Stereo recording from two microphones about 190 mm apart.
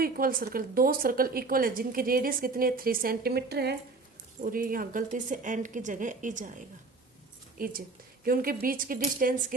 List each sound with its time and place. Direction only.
0.0 s speech: 50° right (ahead or behind)
7.6 s speech: 50° right (ahead or behind)